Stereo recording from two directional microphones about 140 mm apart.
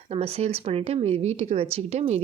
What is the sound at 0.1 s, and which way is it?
Speech, 45° right (ahead or behind).